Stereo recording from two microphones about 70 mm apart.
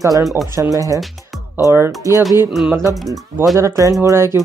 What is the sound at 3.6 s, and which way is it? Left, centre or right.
Speech, right.